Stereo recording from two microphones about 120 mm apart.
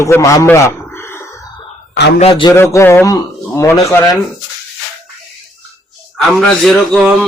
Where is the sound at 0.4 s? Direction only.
15° left (ahead or behind).